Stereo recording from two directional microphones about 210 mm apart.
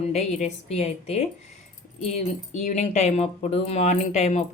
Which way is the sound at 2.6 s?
30° left (ahead or behind).